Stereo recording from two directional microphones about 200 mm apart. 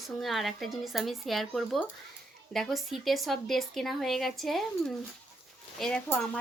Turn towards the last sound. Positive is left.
turn(degrees=5)  # may be behind; listen again after turning